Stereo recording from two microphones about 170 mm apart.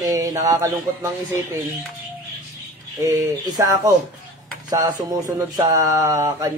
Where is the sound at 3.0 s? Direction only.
20° right (ahead or behind).